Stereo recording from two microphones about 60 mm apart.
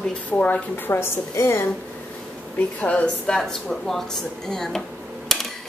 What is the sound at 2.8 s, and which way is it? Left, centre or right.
Speech, centre.